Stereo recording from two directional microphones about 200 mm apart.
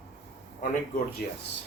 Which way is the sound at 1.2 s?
50° left (ahead or behind).